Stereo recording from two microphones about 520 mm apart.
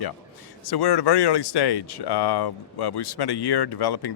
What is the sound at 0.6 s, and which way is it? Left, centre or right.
Speech, left.